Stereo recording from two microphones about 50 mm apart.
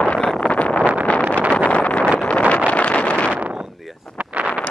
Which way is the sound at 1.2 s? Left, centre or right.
Right.